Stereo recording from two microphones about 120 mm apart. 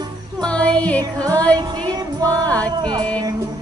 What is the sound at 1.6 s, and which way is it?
Music, 35° right (ahead or behind).